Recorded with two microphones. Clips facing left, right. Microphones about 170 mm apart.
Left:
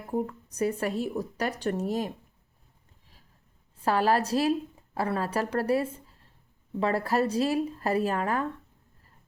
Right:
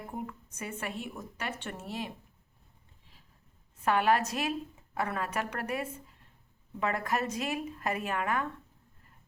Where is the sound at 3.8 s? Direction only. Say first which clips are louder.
Left 2 dB; 35° left (ahead or behind).